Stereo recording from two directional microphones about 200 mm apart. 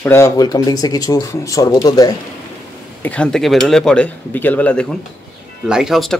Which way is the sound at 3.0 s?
5° left (ahead or behind).